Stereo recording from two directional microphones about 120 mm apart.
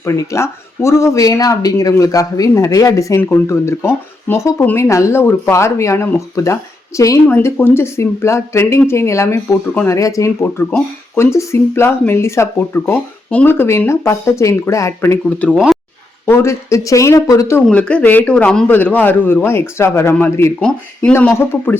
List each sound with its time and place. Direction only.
0.0 s speech: 25° left (ahead or behind)
15.5 s speech: 5° right (ahead or behind)
16.2 s speech: 20° left (ahead or behind)
17.7 s a man's voice: 10° left (ahead or behind)
20.6 s a man's voice: 10° left (ahead or behind)